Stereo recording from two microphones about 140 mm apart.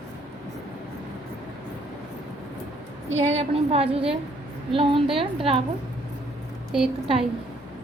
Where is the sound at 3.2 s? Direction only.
45° right (ahead or behind).